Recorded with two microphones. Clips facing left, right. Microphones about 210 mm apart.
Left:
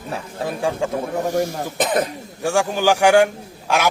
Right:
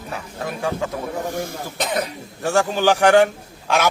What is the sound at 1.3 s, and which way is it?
Speech, 55° left (ahead or behind).